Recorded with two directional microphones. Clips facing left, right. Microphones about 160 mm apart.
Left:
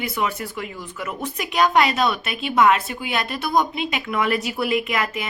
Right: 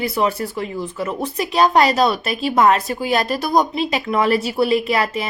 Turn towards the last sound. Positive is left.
turn(degrees=-30)  # may be behind; listen again after turning